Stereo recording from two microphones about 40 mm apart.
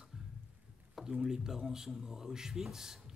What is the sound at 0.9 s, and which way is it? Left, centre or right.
Speech, centre.